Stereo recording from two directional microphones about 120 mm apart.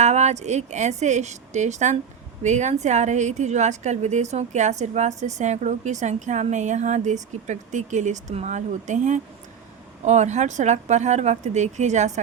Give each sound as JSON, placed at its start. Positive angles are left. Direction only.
{"t": 0.0, "sound": "a woman's voice", "side_deg": -70}
{"t": 10.0, "sound": "a woman's voice", "side_deg": -75}